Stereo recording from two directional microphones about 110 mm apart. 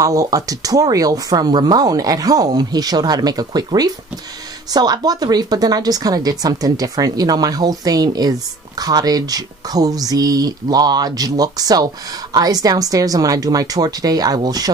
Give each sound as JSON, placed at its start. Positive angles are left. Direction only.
{"t": 0.0, "sound": "speech", "side_deg": -30}